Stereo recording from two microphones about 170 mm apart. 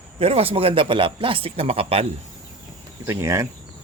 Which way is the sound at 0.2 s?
35° right (ahead or behind).